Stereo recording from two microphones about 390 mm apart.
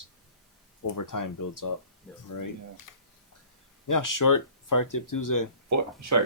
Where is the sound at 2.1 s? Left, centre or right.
Centre.